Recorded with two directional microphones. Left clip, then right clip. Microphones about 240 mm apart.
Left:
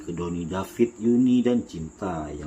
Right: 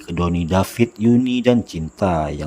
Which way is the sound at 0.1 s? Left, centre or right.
Right.